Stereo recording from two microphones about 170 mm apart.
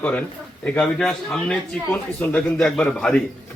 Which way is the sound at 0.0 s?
5° left (ahead or behind).